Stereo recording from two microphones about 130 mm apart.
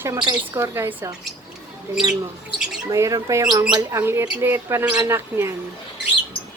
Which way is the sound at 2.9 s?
25° right (ahead or behind).